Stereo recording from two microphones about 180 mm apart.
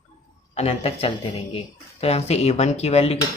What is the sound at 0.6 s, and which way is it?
Speech, 35° left (ahead or behind).